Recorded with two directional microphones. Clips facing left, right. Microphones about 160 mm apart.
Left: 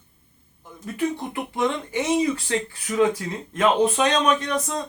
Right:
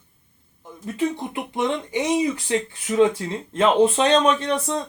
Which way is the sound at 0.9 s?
20° right (ahead or behind).